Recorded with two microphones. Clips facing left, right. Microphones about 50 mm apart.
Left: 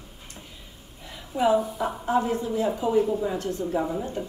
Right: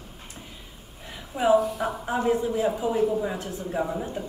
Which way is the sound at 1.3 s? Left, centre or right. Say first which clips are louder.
Right 1 dB; centre.